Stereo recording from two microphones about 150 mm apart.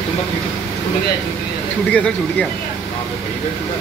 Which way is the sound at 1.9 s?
5° left (ahead or behind).